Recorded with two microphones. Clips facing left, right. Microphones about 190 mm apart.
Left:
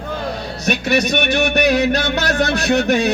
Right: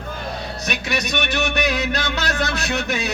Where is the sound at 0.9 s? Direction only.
60° left (ahead or behind).